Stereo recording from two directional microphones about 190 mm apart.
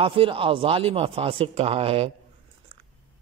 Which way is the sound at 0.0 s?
30° right (ahead or behind).